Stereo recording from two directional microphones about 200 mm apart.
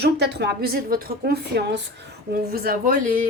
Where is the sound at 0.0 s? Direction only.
55° right (ahead or behind).